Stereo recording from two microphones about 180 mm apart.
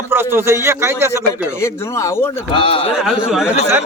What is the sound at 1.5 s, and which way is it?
Speech, 15° left (ahead or behind).